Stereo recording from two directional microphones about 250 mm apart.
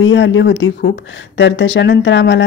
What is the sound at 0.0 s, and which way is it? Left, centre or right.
Speech, left.